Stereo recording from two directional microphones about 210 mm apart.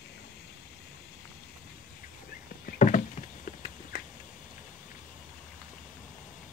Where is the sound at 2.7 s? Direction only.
40° left (ahead or behind).